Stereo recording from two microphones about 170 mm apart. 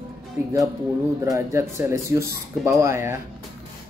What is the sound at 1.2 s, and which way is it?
Speech, 20° right (ahead or behind).